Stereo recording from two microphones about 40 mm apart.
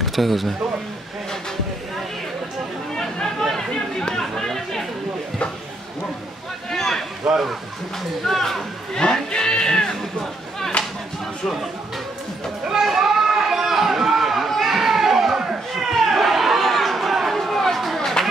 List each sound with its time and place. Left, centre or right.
0.0 s speech: centre
3.5 s chatter: centre
6.7 s a sound: centre
8.3 s speech: centre
8.9 s speech: centre
12.8 s a sound: centre
14.5 s children playing: centre
15.7 s chatter: centre
17.7 s a sound: centre